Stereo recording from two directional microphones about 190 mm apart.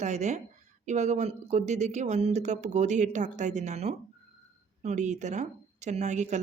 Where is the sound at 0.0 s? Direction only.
40° right (ahead or behind).